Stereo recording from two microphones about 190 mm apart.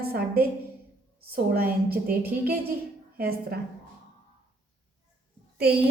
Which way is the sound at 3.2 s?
55° right (ahead or behind).